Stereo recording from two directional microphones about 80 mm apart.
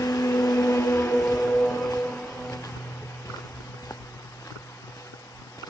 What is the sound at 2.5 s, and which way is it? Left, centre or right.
Music, left.